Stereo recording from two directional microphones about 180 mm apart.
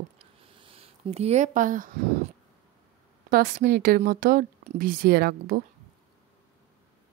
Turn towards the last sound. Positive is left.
turn(degrees=-60)  # may be behind; listen again after turning